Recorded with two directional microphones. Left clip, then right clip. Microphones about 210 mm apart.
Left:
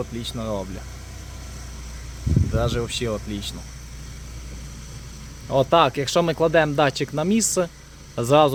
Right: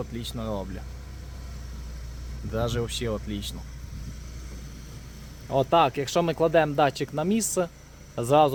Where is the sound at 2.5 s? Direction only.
5° left (ahead or behind).